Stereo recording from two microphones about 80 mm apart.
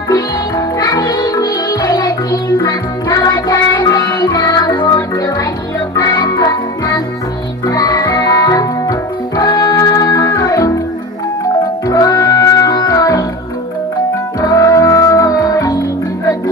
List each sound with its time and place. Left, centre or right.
0.1 s music: left
4.0 s music: left
7.6 s music: left
8.5 s guitar: left
9.4 s music: left
12.4 s music: left
12.6 s music: left
14.4 s music: left
14.8 s music: left